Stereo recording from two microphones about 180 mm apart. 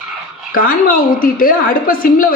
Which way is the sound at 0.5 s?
50° left (ahead or behind).